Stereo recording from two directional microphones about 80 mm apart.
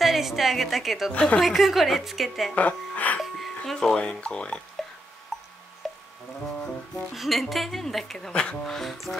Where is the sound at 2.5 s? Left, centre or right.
Centre.